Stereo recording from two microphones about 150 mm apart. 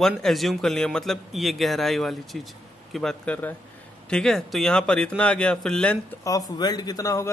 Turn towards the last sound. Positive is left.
turn(degrees=20)  # may be behind; listen again after turning